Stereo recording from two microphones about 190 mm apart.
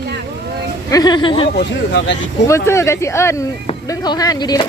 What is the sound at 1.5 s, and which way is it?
Speech, 65° left (ahead or behind).